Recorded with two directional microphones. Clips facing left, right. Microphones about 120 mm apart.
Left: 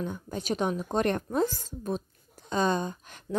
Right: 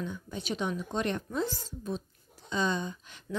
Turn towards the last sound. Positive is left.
turn(degrees=50)  # may be behind; listen again after turning